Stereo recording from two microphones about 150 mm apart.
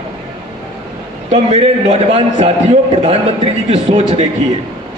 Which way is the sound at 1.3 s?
40° right (ahead or behind).